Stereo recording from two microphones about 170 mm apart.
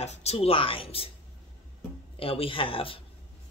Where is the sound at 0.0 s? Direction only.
40° left (ahead or behind).